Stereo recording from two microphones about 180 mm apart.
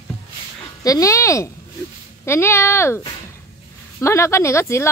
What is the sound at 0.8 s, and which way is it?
A woman's voice, 20° left (ahead or behind).